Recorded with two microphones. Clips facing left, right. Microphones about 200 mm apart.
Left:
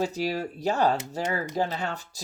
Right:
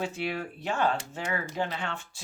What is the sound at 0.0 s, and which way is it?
Speech, 40° left (ahead or behind).